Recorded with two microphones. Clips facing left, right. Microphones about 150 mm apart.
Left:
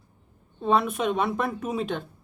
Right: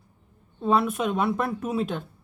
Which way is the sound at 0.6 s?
5° right (ahead or behind).